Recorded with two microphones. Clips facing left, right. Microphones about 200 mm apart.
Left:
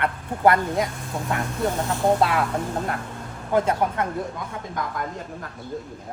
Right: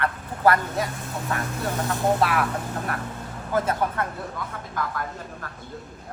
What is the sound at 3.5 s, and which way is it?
Speech, 15° left (ahead or behind).